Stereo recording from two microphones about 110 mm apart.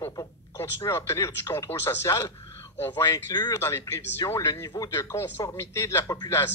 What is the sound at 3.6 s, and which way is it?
Speech, 25° left (ahead or behind).